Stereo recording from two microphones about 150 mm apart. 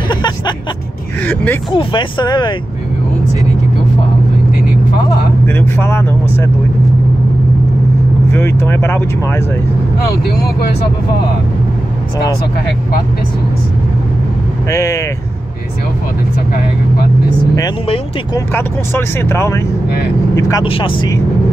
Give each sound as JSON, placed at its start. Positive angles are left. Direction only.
{"t": 0.1, "sound": "music", "side_deg": 30}
{"t": 1.2, "sound": "a sound", "side_deg": 10}
{"t": 1.7, "sound": "speech", "side_deg": 30}
{"t": 5.5, "sound": "speech", "side_deg": 15}
{"t": 8.3, "sound": "speech", "side_deg": 15}
{"t": 14.7, "sound": "speech", "side_deg": 20}
{"t": 18.3, "sound": "speech", "side_deg": 15}
{"t": 20.6, "sound": "speech", "side_deg": 35}